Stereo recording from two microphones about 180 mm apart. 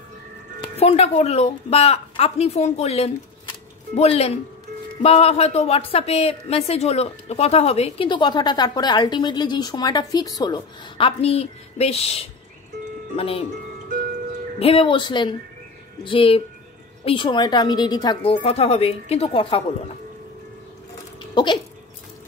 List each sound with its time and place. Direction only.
0.6 s a woman's voice: 35° left (ahead or behind)
14.6 s a woman's voice: 30° left (ahead or behind)